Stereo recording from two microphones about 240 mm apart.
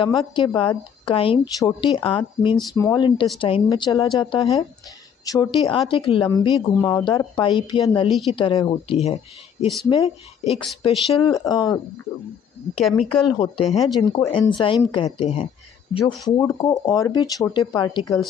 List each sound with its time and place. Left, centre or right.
0.0 s a woman's voice: centre
12.8 s speech: centre
14.1 s a woman's voice: centre